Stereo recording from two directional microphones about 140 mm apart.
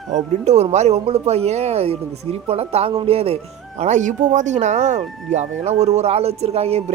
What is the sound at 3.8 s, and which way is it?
Speech, 60° right (ahead or behind).